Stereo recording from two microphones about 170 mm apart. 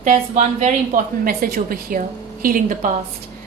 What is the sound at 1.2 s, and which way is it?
A woman's voice, 60° right (ahead or behind).